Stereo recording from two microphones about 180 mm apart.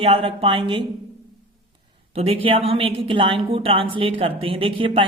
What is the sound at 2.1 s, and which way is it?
A woman's voice, 35° right (ahead or behind).